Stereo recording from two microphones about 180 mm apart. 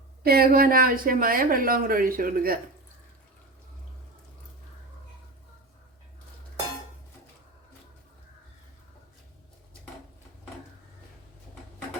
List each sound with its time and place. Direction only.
0.3 s speech: 55° right (ahead or behind)